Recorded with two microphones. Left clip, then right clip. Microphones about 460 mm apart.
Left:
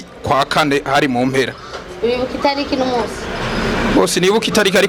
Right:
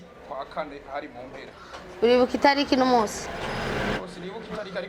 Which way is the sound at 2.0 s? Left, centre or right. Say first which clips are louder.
Left 2 dB; right.